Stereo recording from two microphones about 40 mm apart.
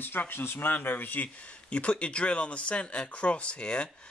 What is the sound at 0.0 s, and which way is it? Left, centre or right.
Speech, left.